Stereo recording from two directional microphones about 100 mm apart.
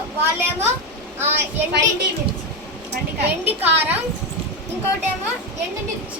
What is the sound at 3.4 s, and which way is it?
Speech, 20° right (ahead or behind).